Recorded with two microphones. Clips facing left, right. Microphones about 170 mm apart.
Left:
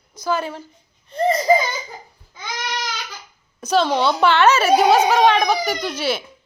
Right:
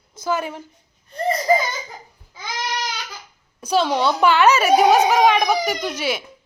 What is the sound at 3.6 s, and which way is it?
A woman's voice, 10° right (ahead or behind).